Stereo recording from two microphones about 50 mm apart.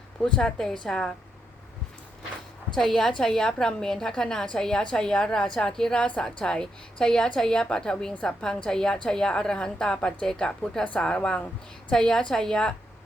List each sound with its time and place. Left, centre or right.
0.2 s a woman's voice: left
2.7 s a woman's voice: centre
5.7 s a woman's voice: centre